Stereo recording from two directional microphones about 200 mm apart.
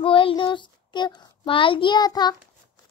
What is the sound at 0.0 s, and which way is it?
A child's voice, 25° left (ahead or behind).